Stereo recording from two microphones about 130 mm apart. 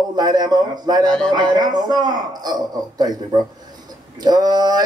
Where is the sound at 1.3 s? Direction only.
35° right (ahead or behind).